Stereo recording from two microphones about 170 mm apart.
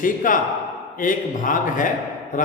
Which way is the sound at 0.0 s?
50° left (ahead or behind).